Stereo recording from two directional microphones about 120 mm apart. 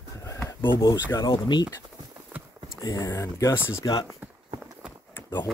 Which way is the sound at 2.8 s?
30° left (ahead or behind).